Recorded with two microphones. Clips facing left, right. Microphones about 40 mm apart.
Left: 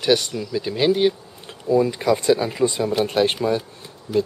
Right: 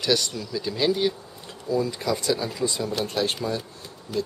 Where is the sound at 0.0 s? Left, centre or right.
Left.